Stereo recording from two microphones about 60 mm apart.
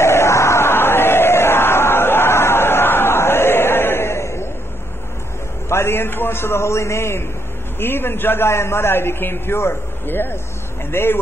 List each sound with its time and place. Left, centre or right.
0.0 s crowd: left
5.7 s a man's voice: left